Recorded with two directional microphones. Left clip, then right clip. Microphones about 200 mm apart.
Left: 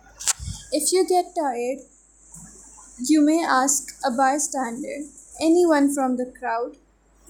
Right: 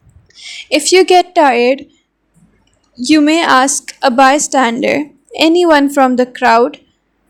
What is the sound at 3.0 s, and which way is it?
A woman's voice, 35° right (ahead or behind).